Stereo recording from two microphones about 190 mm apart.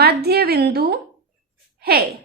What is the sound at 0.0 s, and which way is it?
A woman's voice, 55° right (ahead or behind).